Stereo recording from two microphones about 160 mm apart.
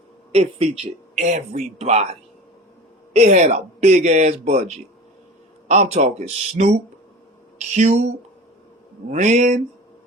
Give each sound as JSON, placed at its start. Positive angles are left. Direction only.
{"t": 0.3, "sound": "speech", "side_deg": -40}
{"t": 3.1, "sound": "speech", "side_deg": -45}
{"t": 5.6, "sound": "speech", "side_deg": -50}
{"t": 7.8, "sound": "speech", "side_deg": -45}